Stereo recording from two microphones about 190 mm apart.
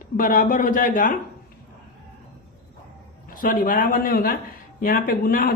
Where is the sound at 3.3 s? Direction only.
45° left (ahead or behind).